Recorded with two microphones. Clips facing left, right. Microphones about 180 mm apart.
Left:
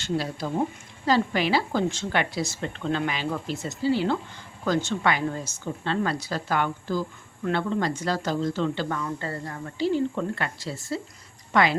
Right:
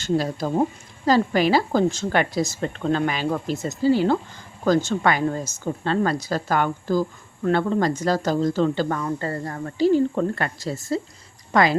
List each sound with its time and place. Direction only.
0.0 s a woman's voice: 45° right (ahead or behind)